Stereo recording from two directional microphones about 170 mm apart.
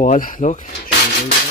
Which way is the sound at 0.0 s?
50° left (ahead or behind).